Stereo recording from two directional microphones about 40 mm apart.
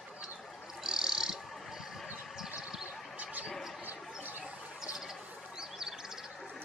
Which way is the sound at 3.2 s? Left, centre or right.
Right.